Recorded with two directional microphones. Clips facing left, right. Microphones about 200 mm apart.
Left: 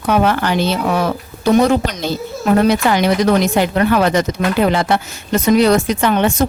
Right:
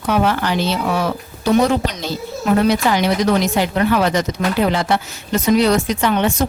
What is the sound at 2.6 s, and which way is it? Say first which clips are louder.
Speech: left 2 dB; 50° left (ahead or behind).